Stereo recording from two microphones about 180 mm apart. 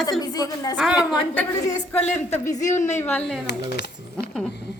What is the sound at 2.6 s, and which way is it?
Speech, 40° left (ahead or behind).